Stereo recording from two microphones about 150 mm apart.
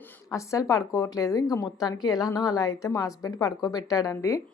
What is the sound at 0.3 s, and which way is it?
A woman's voice, 20° left (ahead or behind).